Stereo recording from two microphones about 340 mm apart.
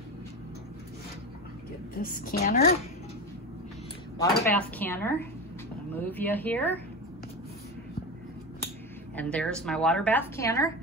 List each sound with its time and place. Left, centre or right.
2.0 s a woman's voice: left
4.2 s speech: centre
9.1 s speech: centre